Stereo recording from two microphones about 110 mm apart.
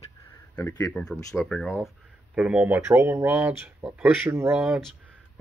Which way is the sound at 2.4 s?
10° right (ahead or behind).